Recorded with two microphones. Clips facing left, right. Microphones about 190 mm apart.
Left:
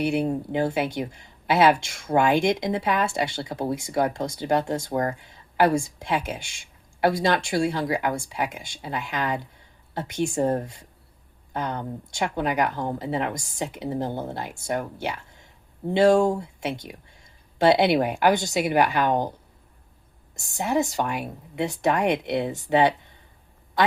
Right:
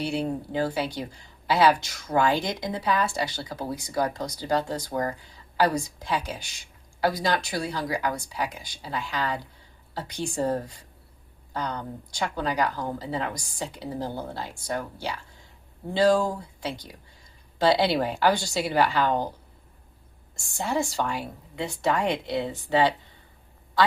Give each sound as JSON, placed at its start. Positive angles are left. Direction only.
{"t": 0.0, "sound": "speech", "side_deg": 20}